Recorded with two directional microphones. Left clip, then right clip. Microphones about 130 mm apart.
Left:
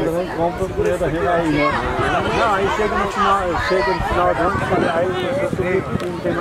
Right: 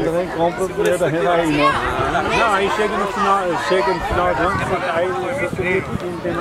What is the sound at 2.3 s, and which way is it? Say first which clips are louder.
Speech: right 3 dB; 30° right (ahead or behind).